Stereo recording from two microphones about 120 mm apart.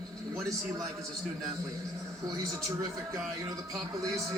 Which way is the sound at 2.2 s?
30° right (ahead or behind).